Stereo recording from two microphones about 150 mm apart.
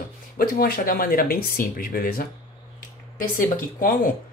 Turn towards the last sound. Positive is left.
turn(degrees=65)  # may be behind; listen again after turning